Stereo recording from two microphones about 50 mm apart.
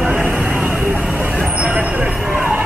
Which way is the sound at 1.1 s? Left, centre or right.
Right.